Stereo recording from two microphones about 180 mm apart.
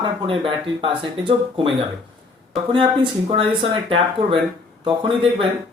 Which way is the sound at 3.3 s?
30° right (ahead or behind).